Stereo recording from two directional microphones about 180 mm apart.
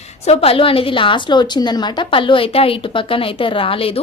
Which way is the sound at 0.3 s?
30° left (ahead or behind).